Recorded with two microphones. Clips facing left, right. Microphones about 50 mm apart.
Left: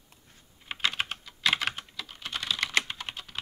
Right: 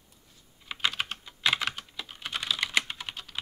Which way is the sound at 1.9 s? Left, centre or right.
Centre.